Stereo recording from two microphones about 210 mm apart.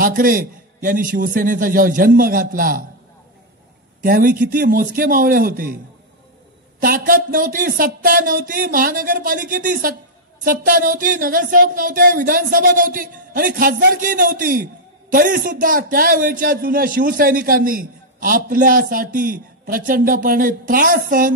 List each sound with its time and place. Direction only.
0.0 s a man's voice: 40° right (ahead or behind)
4.0 s a man's voice: 40° right (ahead or behind)
6.8 s a man's voice: 40° right (ahead or behind)